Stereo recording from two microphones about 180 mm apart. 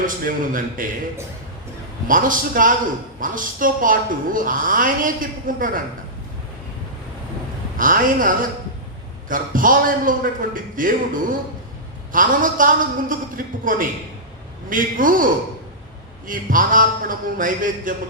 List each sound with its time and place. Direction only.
0.0 s a woman's voice: 50° right (ahead or behind)
2.0 s a woman's voice: 50° right (ahead or behind)
7.8 s a woman's voice: 50° right (ahead or behind)